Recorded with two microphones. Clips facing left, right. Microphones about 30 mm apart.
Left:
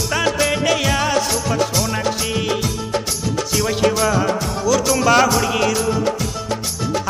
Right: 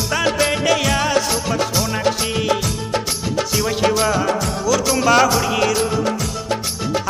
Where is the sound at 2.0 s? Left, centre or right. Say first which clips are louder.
Right 2 dB; right.